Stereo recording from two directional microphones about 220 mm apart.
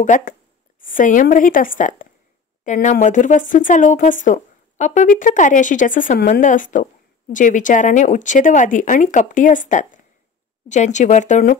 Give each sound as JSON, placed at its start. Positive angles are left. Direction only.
{"t": 0.0, "sound": "speech", "side_deg": 35}